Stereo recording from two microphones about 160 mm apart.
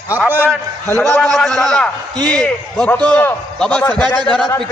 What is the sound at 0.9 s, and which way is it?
A man's voice, 10° left (ahead or behind).